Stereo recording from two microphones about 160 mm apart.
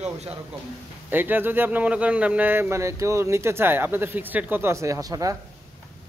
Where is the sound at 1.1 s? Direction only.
10° right (ahead or behind).